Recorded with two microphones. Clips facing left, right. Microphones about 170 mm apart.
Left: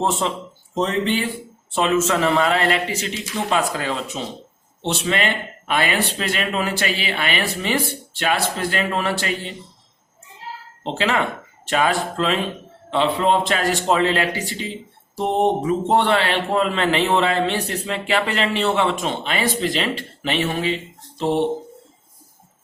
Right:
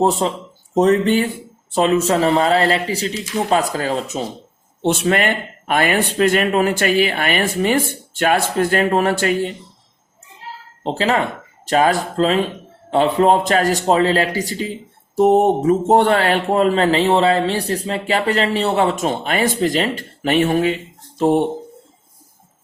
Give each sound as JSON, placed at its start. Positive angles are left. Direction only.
{"t": 0.0, "sound": "a man's voice", "side_deg": -40}
{"t": 10.8, "sound": "a man's voice", "side_deg": -35}